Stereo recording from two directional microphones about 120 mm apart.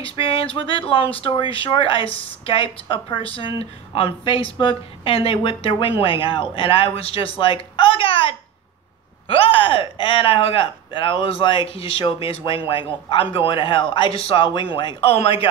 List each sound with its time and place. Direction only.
0.2 s speech: 50° left (ahead or behind)